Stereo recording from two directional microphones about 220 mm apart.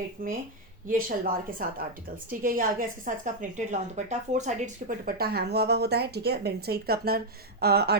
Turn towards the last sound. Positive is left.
turn(degrees=-45)  # may be behind; listen again after turning